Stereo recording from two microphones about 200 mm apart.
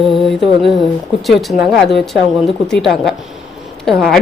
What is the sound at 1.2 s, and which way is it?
Speech, centre (ahead or behind).